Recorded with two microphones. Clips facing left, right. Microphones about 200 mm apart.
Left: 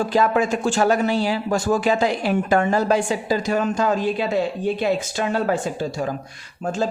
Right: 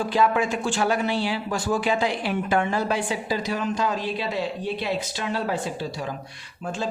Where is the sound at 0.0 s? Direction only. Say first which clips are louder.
Left 3 dB; 45° left (ahead or behind).